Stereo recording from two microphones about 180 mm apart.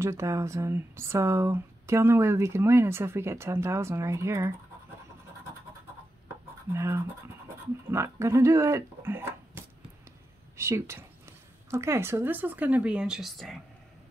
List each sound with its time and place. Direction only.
0.0 s speech: 15° right (ahead or behind)
6.7 s speech: 15° right (ahead or behind)